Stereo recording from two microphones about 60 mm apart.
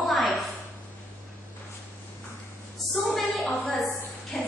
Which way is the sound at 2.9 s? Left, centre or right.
Centre.